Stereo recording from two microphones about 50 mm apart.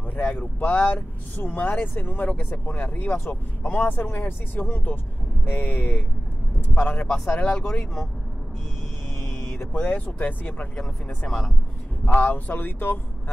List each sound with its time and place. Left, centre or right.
0.7 s speech: left
1.3 s speech: left
9.7 s speech: left
11.2 s speech: centre
12.1 s speech: left